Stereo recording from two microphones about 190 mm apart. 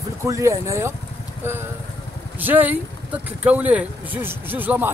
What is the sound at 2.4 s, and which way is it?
Speech, 10° right (ahead or behind).